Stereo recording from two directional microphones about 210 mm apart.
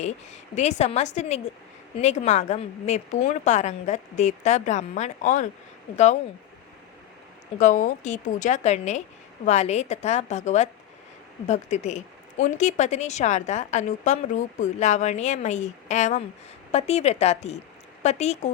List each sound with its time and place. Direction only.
0.0 s speech: 30° left (ahead or behind)
7.6 s speech: 40° left (ahead or behind)